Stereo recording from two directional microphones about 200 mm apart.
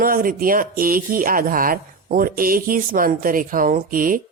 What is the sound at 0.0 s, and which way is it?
Speech, 45° right (ahead or behind).